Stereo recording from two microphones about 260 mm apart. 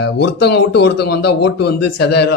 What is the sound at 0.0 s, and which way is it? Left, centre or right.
Speech, left.